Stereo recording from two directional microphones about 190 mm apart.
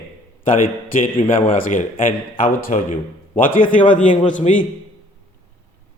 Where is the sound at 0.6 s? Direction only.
45° left (ahead or behind).